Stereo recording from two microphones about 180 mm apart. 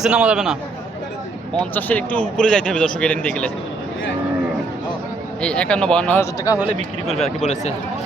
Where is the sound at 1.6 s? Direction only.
10° left (ahead or behind).